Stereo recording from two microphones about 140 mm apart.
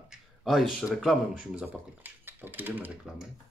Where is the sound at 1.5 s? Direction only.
15° right (ahead or behind).